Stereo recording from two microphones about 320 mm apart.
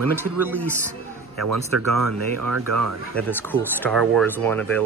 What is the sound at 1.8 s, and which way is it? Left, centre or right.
Speech, right.